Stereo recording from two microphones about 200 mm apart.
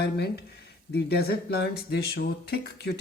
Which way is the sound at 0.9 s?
50° left (ahead or behind).